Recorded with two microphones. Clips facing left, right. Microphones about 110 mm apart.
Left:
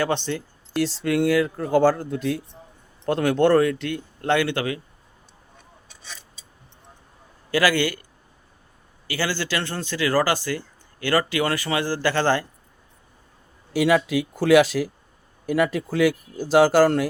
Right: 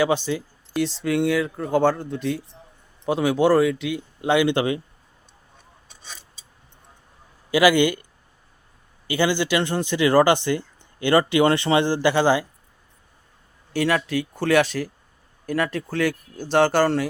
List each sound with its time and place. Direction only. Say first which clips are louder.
0.0 s speech: right 3 dB; 5° right (ahead or behind); by 4.8 s 25° right (ahead or behind)
7.5 s speech: right 4 dB; 15° right (ahead or behind)
9.0 s speech: right 5 dB; 20° right (ahead or behind)
13.7 s speech: left 3 dB; 5° left (ahead or behind)